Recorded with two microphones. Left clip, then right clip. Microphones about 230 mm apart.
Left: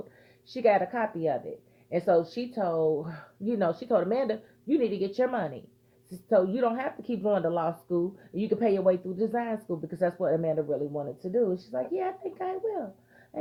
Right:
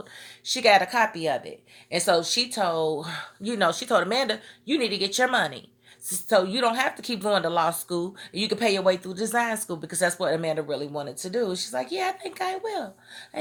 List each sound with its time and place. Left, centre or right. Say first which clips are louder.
0.4 s speech: right 5 dB; centre
2.7 s speech: right 1 dB; right
3.0 s speech: right 5 dB; centre